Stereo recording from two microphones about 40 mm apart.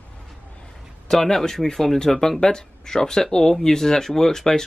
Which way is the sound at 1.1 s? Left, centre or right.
Centre.